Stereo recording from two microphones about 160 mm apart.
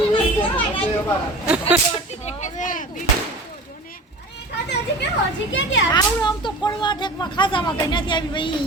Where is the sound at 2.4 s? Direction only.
50° left (ahead or behind).